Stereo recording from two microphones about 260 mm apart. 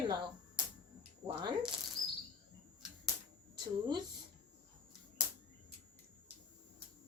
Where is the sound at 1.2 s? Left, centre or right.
Centre.